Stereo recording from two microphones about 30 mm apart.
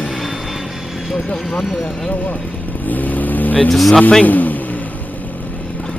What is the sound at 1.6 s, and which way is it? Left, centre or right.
Speech, centre.